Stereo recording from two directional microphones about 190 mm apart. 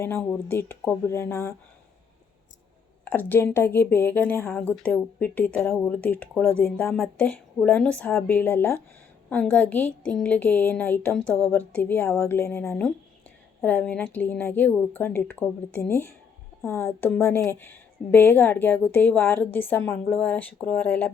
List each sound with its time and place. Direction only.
0.0 s a woman's voice: 10° left (ahead or behind)
3.0 s a woman's voice: 10° left (ahead or behind)